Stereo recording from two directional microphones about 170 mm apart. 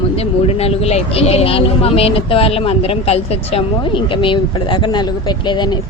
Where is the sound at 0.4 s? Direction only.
35° left (ahead or behind).